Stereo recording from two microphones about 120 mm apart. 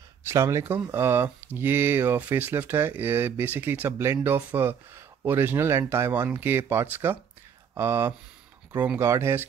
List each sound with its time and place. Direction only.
0.3 s speech: 25° right (ahead or behind)